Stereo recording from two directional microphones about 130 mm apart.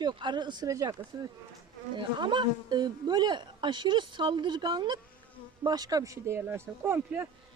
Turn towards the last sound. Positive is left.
turn(degrees=-20)  # may be behind; listen again after turning